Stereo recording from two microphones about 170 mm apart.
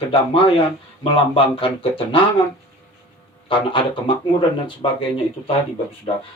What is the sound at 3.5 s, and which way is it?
Speech, 30° left (ahead or behind).